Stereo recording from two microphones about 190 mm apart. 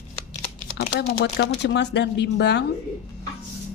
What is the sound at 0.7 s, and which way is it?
Speech, 60° left (ahead or behind).